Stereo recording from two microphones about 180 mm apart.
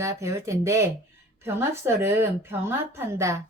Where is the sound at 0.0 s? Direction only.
15° right (ahead or behind).